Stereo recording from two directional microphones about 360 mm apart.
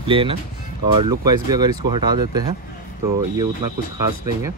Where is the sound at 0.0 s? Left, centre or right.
Centre.